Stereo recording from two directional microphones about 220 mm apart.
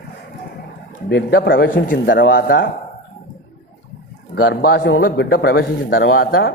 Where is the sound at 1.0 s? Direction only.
50° left (ahead or behind).